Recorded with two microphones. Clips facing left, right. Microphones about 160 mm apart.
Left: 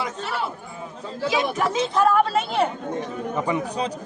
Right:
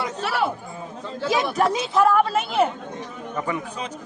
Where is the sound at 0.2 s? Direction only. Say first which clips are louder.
Right 3 dB; 80° right.